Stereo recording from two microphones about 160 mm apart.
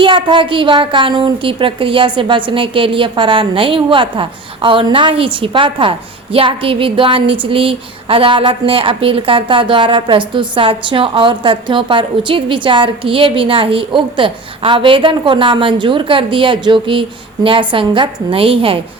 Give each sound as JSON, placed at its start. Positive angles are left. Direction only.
{"t": 0.0, "sound": "a woman's voice", "side_deg": -30}